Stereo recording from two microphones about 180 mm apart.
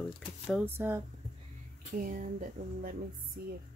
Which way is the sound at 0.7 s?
15° right (ahead or behind).